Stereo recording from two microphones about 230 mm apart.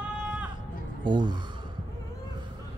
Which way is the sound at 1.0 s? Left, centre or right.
Centre.